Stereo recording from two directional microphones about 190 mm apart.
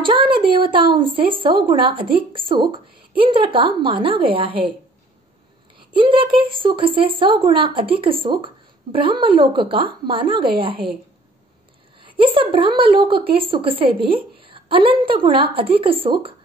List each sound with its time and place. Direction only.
0.0 s speech: 25° right (ahead or behind)
5.8 s speech: 25° right (ahead or behind)
12.0 s a woman's voice: 25° right (ahead or behind)